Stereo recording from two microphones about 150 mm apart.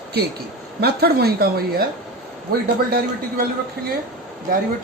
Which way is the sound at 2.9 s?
90° right.